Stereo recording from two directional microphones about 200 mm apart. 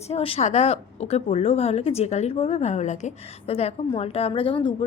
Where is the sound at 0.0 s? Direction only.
30° left (ahead or behind).